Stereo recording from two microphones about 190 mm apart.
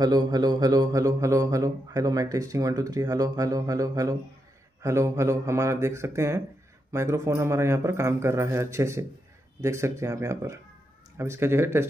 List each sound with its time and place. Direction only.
0.0 s a man's voice: 20° right (ahead or behind)